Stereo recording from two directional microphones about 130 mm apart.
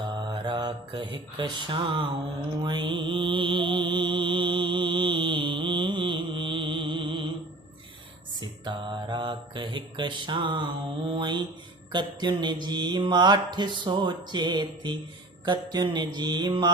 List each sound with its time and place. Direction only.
0.0 s mantra: 35° right (ahead or behind)
2.6 s music: 35° right (ahead or behind)
8.4 s mantra: 35° right (ahead or behind)